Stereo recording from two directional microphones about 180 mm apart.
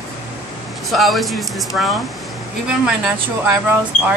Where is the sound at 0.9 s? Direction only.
Centre (ahead or behind).